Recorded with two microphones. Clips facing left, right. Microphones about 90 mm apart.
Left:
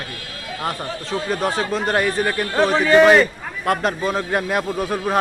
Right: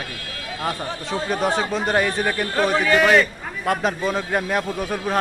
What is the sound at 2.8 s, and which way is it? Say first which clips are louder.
Speech: left 7 dB; 30° left (ahead or behind).